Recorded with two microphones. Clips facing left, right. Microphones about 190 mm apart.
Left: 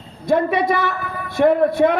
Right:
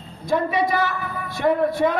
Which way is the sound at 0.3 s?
60° left (ahead or behind).